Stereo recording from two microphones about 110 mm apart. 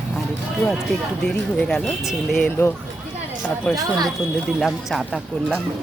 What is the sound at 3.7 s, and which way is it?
Speech, 30° right (ahead or behind).